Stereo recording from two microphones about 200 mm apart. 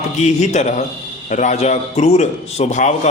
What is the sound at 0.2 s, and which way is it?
A man's voice, 35° left (ahead or behind).